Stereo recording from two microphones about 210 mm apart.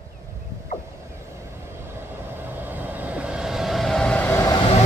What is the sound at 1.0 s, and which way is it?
Vehicle, 15° right (ahead or behind).